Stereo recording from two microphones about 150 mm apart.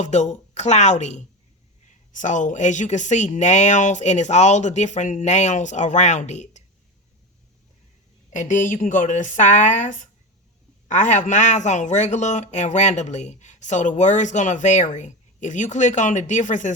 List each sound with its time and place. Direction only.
0.0 s speech: 50° left (ahead or behind)
8.3 s a woman's voice: 55° left (ahead or behind)